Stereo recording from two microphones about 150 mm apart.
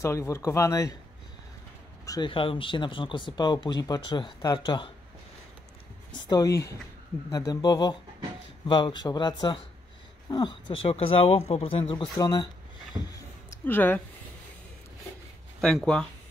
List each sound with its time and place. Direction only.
0.0 s speech: 20° left (ahead or behind)
2.0 s speech: 30° left (ahead or behind)
6.1 s speech: 30° left (ahead or behind)
12.2 s speech: 25° left (ahead or behind)
12.9 s a sound: 20° right (ahead or behind)
13.7 s speech: 10° left (ahead or behind)
15.6 s speech: 5° left (ahead or behind)